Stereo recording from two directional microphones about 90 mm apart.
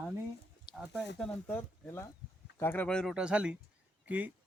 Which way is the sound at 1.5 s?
15° left (ahead or behind).